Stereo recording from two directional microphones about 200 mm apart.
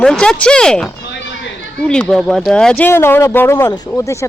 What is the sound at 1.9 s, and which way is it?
Speech, 5° left (ahead or behind).